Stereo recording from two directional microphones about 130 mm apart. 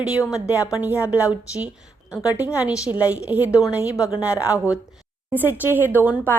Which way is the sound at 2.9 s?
10° right (ahead or behind).